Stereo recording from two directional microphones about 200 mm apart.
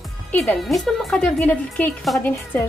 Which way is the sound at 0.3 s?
5° left (ahead or behind).